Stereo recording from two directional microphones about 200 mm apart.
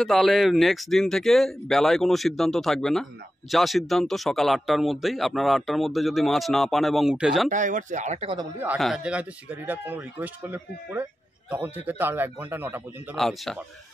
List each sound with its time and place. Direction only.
0.0 s speech: centre (ahead or behind)
7.4 s speech: 40° right (ahead or behind)
8.5 s speech: 5° right (ahead or behind)
13.1 s speech: centre (ahead or behind)